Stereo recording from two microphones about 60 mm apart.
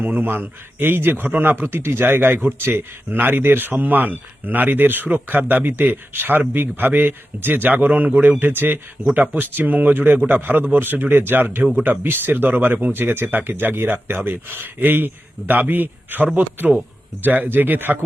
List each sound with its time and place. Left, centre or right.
0.0 s speech: right
1.6 s speech: right